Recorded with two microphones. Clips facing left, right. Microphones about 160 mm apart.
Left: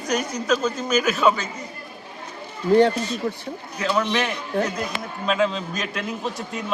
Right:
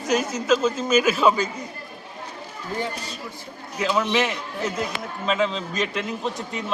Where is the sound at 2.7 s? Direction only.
70° left (ahead or behind).